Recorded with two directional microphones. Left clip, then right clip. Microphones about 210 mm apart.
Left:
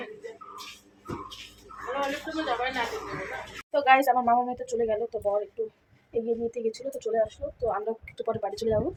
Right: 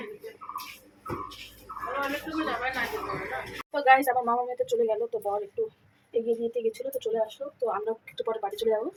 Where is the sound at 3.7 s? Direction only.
20° left (ahead or behind).